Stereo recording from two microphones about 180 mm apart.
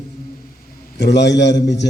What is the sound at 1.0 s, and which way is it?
Speech, 70° left (ahead or behind).